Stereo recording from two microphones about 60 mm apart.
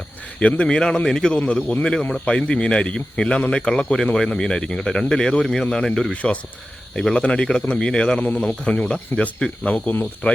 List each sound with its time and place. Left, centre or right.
0.3 s speech: centre
8.2 s speech: left